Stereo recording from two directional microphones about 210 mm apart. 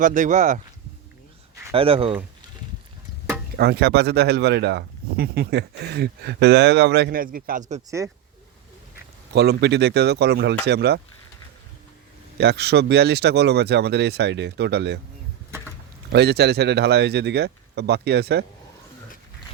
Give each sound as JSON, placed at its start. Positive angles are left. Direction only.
{"t": 0.0, "sound": "speech", "side_deg": -35}
{"t": 1.7, "sound": "speech", "side_deg": -25}
{"t": 3.6, "sound": "speech", "side_deg": -50}
{"t": 7.9, "sound": "speech", "side_deg": -15}
{"t": 9.3, "sound": "speech", "side_deg": -50}
{"t": 12.4, "sound": "speech", "side_deg": -50}
{"t": 16.1, "sound": "speech", "side_deg": -50}